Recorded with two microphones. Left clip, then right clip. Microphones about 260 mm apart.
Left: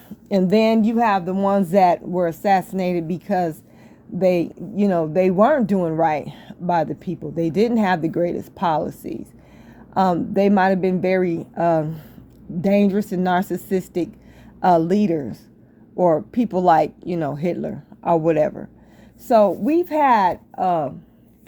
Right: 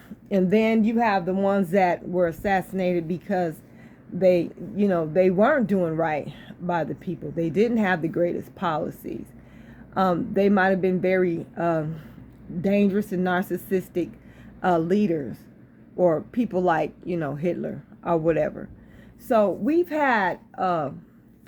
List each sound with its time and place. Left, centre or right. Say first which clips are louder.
0.5 s speech: left 5 dB; left